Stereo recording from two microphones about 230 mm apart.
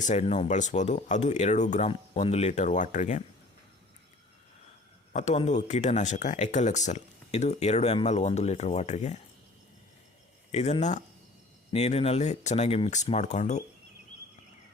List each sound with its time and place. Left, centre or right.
0.0 s speech: left
5.1 s speech: left
10.5 s speech: left